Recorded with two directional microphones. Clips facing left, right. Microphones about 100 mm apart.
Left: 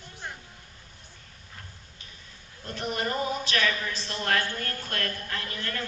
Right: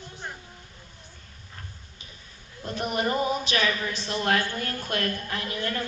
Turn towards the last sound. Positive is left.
turn(degrees=-15)  # may be behind; listen again after turning